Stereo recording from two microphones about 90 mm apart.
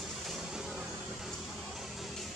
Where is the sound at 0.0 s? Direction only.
5° right (ahead or behind).